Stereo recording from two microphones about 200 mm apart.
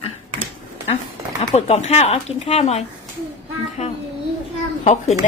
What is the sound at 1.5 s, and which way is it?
Speech, 35° left (ahead or behind).